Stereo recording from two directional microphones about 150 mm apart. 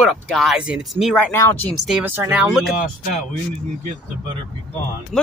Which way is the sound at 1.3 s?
20° left (ahead or behind).